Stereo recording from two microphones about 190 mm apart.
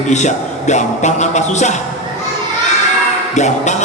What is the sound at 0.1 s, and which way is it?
Speech, 40° left (ahead or behind).